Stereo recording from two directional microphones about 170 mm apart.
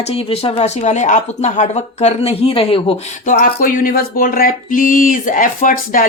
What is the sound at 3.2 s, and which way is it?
Speech, 50° left (ahead or behind).